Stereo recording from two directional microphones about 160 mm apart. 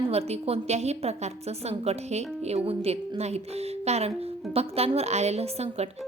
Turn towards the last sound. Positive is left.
turn(degrees=-40)  # may be behind; listen again after turning